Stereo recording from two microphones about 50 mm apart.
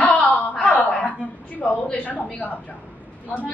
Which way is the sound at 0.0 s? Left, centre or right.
Left.